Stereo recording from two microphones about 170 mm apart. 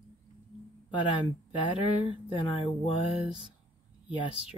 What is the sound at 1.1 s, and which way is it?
Speech, 30° left (ahead or behind).